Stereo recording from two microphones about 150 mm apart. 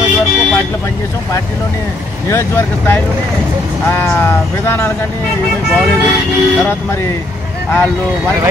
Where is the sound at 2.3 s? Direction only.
20° left (ahead or behind).